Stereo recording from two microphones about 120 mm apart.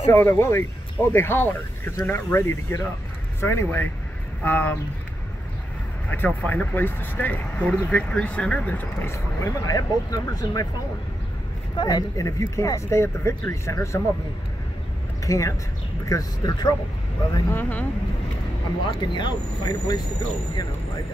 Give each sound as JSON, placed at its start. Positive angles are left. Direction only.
{"t": 0.1, "sound": "speech", "side_deg": 20}
{"t": 6.0, "sound": "speech", "side_deg": 15}
{"t": 11.7, "sound": "speech", "side_deg": 35}
{"t": 15.2, "sound": "speech", "side_deg": 25}
{"t": 17.5, "sound": "speech", "side_deg": 15}
{"t": 18.9, "sound": "speech", "side_deg": 40}